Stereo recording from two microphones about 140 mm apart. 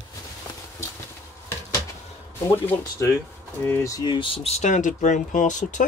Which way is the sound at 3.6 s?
20° left (ahead or behind).